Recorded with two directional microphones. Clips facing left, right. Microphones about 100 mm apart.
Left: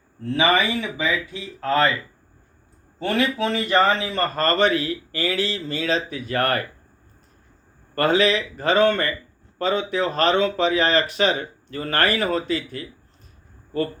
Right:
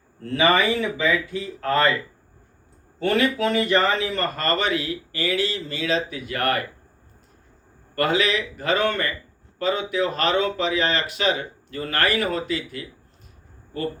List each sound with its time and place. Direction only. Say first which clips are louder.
0.3 s speech: right 1 dB; 20° left (ahead or behind)
3.2 s speech: even; 25° left (ahead or behind)
4.4 s speech: left 6 dB; 40° left (ahead or behind)
7.9 s speech: left 3 dB; 35° left (ahead or behind)